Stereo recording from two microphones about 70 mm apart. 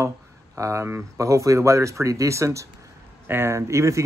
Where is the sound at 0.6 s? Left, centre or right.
Right.